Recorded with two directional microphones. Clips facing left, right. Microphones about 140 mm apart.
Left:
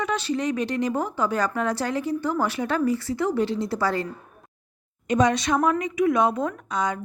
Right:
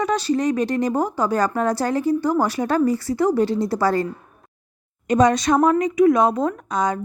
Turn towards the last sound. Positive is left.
turn(degrees=-45)  # may be behind; listen again after turning